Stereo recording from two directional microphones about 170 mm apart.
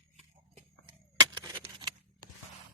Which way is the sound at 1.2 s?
25° right (ahead or behind).